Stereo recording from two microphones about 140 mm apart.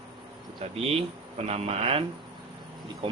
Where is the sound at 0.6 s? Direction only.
45° right (ahead or behind).